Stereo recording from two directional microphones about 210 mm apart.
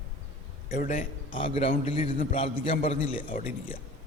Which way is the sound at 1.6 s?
30° left (ahead or behind).